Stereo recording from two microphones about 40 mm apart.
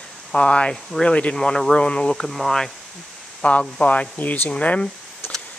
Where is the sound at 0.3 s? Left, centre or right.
Left.